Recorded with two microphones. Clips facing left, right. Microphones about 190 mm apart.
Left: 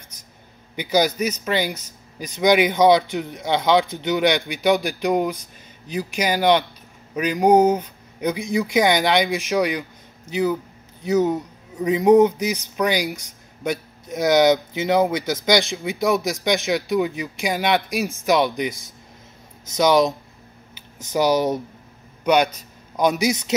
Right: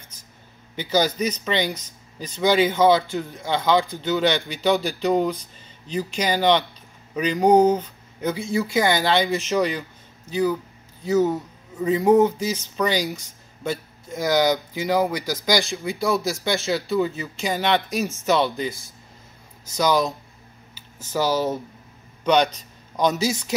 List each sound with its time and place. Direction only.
0.7 s a man's voice: 15° left (ahead or behind)